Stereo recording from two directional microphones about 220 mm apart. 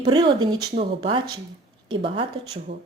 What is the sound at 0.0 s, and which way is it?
Speech, 20° right (ahead or behind).